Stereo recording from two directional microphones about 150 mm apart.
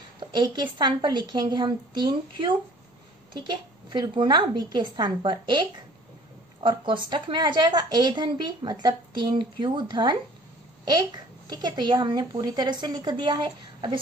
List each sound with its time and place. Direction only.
0.2 s a woman's voice: 30° right (ahead or behind)